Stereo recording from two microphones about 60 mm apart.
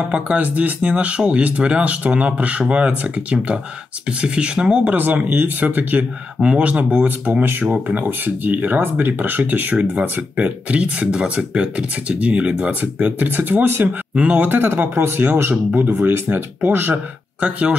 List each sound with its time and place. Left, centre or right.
0.1 s speech: right
4.9 s speech: right
14.1 s speech: right
16.9 s speech: right